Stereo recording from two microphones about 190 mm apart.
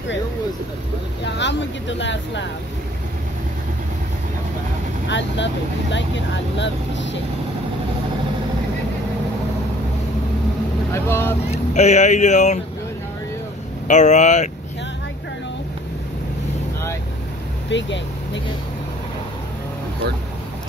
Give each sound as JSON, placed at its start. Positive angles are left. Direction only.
{"t": 1.2, "sound": "speech", "side_deg": 65}
{"t": 5.0, "sound": "speech", "side_deg": 70}
{"t": 10.9, "sound": "speech", "side_deg": 10}
{"t": 11.5, "sound": "speech", "side_deg": 35}
{"t": 13.8, "sound": "speech", "side_deg": 40}
{"t": 17.6, "sound": "speech", "side_deg": 70}